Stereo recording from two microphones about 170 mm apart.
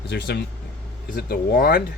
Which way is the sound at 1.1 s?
65° left (ahead or behind).